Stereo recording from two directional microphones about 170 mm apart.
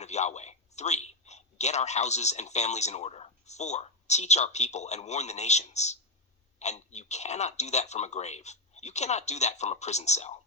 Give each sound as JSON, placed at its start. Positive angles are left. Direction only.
{"t": 0.0, "sound": "a man's voice", "side_deg": 40}